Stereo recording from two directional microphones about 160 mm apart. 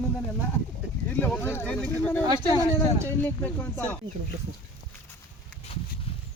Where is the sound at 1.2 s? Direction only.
15° left (ahead or behind).